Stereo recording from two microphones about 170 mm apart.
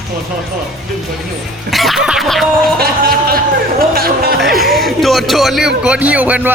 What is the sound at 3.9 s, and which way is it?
Music, 60° right (ahead or behind).